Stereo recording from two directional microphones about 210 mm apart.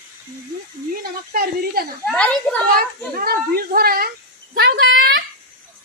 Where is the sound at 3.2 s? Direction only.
45° right (ahead or behind).